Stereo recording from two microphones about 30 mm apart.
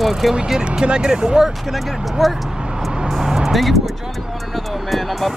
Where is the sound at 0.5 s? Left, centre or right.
Right.